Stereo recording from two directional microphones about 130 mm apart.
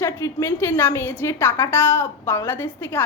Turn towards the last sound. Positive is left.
turn(degrees=15)  # may be behind; listen again after turning